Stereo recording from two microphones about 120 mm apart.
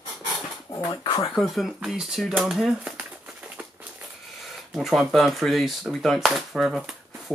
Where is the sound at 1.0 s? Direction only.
40° left (ahead or behind).